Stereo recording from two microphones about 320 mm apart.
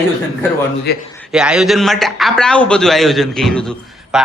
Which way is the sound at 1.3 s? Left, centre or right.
Centre.